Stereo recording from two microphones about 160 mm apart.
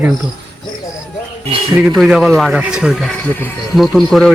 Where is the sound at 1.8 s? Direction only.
Centre (ahead or behind).